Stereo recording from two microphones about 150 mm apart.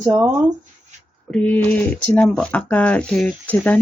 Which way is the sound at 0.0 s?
25° right (ahead or behind).